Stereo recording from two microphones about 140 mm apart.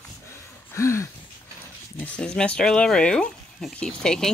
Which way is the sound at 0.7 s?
20° left (ahead or behind).